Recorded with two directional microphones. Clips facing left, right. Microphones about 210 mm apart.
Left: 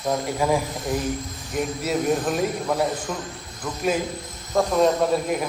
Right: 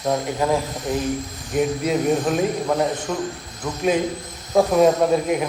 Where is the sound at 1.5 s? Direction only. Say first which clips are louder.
Right 4 dB; centre (ahead or behind).